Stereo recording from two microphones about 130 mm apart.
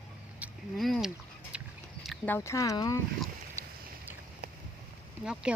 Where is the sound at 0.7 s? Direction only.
Centre (ahead or behind).